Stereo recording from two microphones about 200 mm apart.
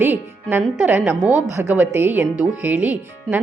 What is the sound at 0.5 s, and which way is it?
Speech, 10° right (ahead or behind).